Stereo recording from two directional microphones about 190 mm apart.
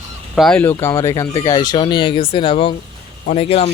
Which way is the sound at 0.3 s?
5° left (ahead or behind).